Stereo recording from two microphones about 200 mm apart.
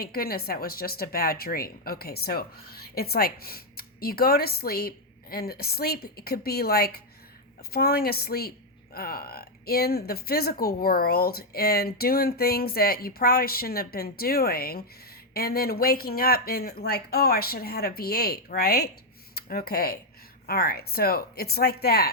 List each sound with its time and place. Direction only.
0.0 s speech: 50° left (ahead or behind)